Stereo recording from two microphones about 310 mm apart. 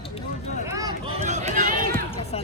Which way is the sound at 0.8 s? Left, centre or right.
Centre.